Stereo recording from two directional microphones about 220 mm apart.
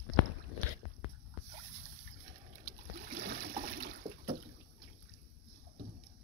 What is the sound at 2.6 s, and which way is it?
Water, 45° right (ahead or behind).